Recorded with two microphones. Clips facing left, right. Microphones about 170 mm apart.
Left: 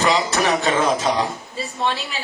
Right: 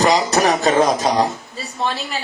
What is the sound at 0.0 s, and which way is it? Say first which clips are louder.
Speech: right 4 dB; 40° right (ahead or behind).